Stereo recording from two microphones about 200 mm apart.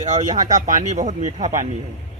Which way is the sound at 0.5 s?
40° right (ahead or behind).